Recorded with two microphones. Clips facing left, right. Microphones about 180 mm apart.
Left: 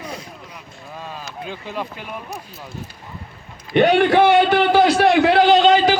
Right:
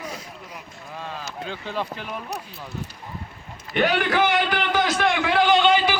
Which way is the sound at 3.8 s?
30° left (ahead or behind).